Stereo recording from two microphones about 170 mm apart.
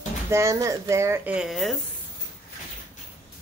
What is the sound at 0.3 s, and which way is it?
Speech, 15° right (ahead or behind).